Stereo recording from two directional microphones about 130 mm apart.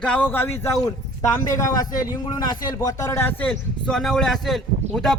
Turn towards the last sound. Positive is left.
turn(degrees=5)  # may be behind; listen again after turning